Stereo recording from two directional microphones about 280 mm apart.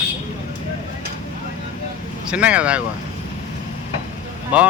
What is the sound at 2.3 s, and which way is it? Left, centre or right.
Speech, centre.